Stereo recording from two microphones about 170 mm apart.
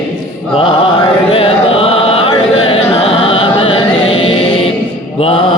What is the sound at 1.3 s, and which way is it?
Music, 35° left (ahead or behind).